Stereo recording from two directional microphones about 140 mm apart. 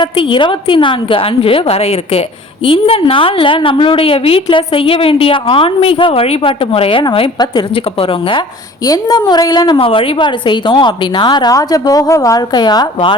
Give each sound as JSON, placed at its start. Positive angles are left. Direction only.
{"t": 0.0, "sound": "a woman's voice", "side_deg": 35}
{"t": 8.9, "sound": "a woman's voice", "side_deg": 25}